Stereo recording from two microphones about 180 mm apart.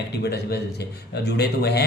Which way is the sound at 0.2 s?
65° left (ahead or behind).